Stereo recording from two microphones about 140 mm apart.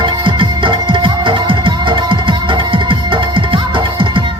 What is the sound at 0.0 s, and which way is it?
Music, 35° right (ahead or behind).